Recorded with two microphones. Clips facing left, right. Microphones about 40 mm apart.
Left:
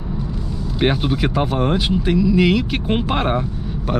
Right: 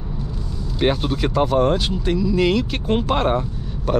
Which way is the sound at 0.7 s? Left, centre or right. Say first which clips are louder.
Left 1 dB; centre.